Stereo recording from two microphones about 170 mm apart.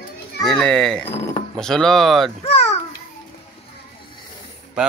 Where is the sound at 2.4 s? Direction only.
35° left (ahead or behind).